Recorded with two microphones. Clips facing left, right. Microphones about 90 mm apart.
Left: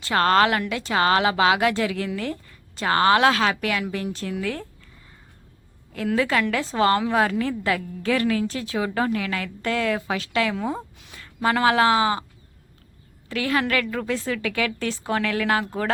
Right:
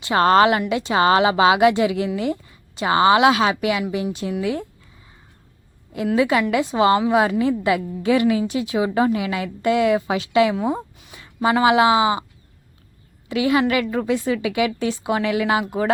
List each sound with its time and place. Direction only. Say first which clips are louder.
0.0 s a woman's voice: right 4 dB; 20° right (ahead or behind)
6.1 s a woman's voice: right 4 dB; 15° right (ahead or behind)
10.9 s speech: right 5 dB; 5° right (ahead or behind)
13.2 s a woman's voice: right 5 dB; 15° right (ahead or behind)